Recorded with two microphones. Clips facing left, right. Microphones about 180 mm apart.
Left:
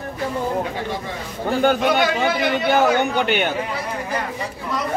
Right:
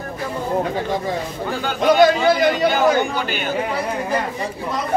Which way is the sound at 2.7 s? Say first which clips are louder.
Even; 60° left (ahead or behind).